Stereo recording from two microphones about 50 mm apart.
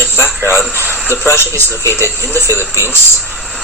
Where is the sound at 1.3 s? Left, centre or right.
Left.